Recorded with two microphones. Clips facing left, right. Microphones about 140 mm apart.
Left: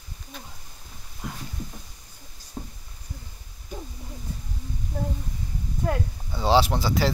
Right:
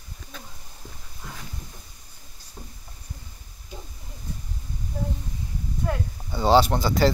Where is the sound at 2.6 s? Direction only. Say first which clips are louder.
Left 7 dB; 45° left (ahead or behind).